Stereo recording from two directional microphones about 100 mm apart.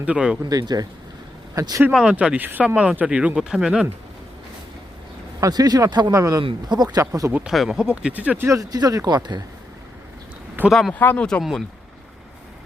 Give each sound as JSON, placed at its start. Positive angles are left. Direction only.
{"t": 0.0, "sound": "speech", "side_deg": -10}
{"t": 0.4, "sound": "speech", "side_deg": -40}
{"t": 1.9, "sound": "speech", "side_deg": -10}
{"t": 5.4, "sound": "speech", "side_deg": -40}
{"t": 7.5, "sound": "speech", "side_deg": -5}
{"t": 8.4, "sound": "speech", "side_deg": -35}
{"t": 10.7, "sound": "speech", "side_deg": 0}
{"t": 10.9, "sound": "speech", "side_deg": 15}